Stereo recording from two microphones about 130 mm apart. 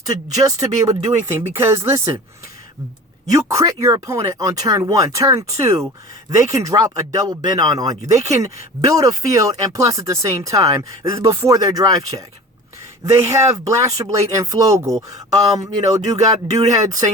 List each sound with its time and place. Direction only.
0.1 s speech: 25° right (ahead or behind)
3.2 s speech: 25° right (ahead or behind)